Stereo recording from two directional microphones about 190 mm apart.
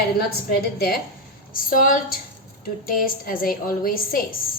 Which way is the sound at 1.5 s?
45° left (ahead or behind).